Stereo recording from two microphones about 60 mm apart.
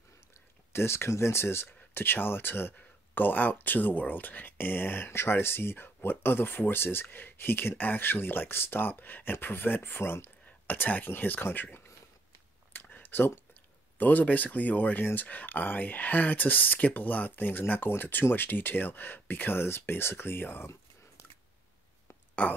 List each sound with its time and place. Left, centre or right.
0.3 s speech: left
10.4 s speech: left
12.8 s a sound: left
13.5 s speech: left
22.4 s speech: left